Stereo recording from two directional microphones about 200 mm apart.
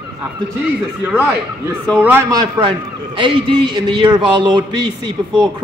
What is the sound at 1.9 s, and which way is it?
Speech, 5° right (ahead or behind).